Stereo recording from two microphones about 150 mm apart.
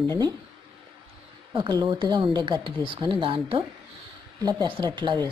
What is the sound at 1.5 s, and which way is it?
Speech, 35° right (ahead or behind).